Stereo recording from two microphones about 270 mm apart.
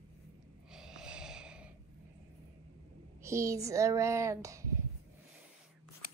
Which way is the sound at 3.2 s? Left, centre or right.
Centre.